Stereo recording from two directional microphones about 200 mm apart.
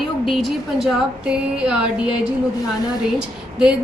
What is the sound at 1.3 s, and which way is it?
Speech, 5° right (ahead or behind).